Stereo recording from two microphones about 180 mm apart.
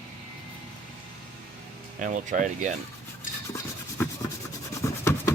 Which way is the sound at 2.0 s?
45° right (ahead or behind).